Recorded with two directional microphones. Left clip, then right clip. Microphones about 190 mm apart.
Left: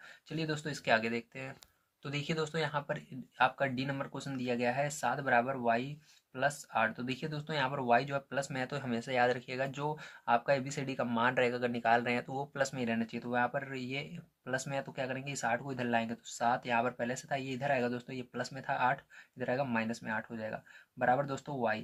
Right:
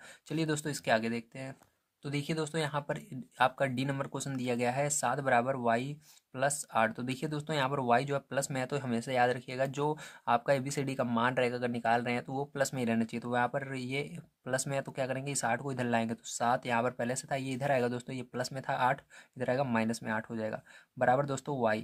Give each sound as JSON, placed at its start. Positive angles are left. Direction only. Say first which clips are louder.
{"t": 0.3, "sound": "speech", "louder": "right 4 dB", "side_deg": -55}